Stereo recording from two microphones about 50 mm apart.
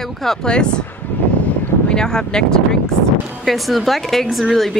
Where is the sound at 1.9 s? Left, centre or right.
Centre.